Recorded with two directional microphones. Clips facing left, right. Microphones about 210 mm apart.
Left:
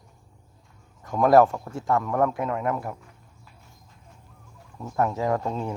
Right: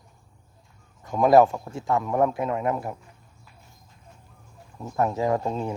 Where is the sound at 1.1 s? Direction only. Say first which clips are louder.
Even; 20° right (ahead or behind).